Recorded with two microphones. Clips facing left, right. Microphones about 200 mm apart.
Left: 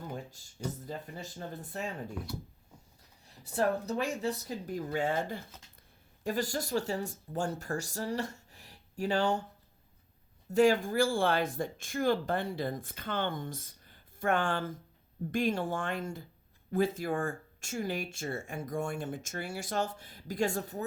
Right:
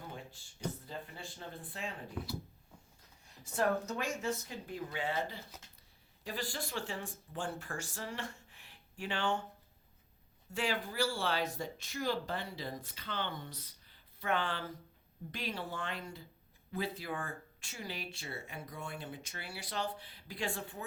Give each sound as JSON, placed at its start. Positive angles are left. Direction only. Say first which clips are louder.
{"t": 0.1, "sound": "speech", "louder": "left 6 dB", "side_deg": 40}
{"t": 3.4, "sound": "speech", "louder": "left 3 dB", "side_deg": 35}
{"t": 10.5, "sound": "speech", "louder": "left 12 dB", "side_deg": 45}